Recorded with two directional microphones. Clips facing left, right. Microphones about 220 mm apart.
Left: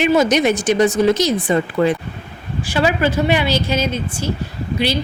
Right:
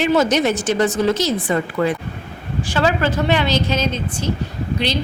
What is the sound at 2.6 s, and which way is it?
Speech, 10° left (ahead or behind).